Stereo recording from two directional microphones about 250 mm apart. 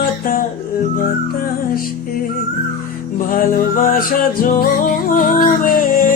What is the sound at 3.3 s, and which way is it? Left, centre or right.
Music, left.